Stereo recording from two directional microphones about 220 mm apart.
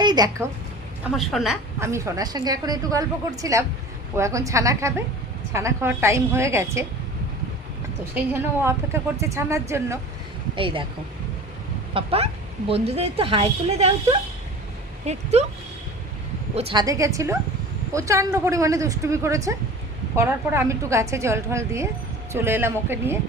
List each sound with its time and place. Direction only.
0.0 s a woman's voice: 20° right (ahead or behind)
1.1 s a woman's voice: centre (ahead or behind)
1.8 s a woman's voice: 10° right (ahead or behind)
8.1 s a woman's voice: 10° right (ahead or behind)
10.5 s a woman's voice: 25° right (ahead or behind)
11.9 s a woman's voice: 25° right (ahead or behind)
16.6 s a woman's voice: 25° right (ahead or behind)
16.8 s a woman's voice: 15° right (ahead or behind)